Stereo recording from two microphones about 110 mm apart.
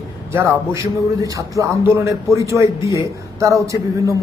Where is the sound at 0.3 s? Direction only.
25° right (ahead or behind).